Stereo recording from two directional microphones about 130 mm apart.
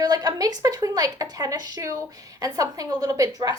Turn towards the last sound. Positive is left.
turn(degrees=-30)  # may be behind; listen again after turning